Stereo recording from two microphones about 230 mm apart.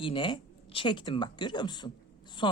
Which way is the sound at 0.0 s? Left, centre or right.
Left.